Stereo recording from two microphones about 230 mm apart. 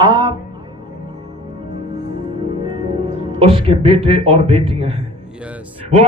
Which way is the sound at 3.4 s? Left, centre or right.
Right.